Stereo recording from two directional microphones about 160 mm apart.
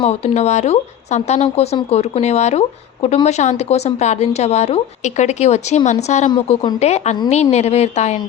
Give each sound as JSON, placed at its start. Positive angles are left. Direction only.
{"t": 0.0, "sound": "a woman's voice", "side_deg": 45}